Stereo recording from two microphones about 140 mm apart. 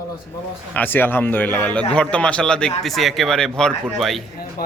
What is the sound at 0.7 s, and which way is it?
A man's voice, 15° left (ahead or behind).